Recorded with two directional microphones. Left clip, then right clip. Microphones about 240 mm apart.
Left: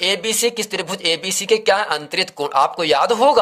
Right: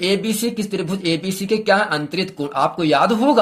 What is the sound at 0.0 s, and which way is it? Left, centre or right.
Speech, left.